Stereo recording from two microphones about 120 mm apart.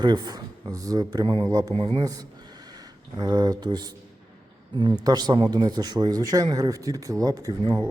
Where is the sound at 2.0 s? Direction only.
30° right (ahead or behind).